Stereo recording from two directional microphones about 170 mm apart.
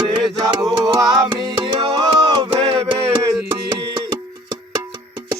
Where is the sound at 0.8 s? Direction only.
25° right (ahead or behind).